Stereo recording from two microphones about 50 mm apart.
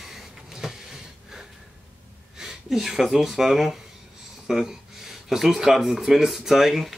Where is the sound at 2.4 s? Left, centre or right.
Centre.